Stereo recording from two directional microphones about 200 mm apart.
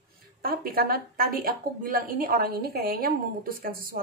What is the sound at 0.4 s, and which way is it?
A woman's voice, 45° right (ahead or behind).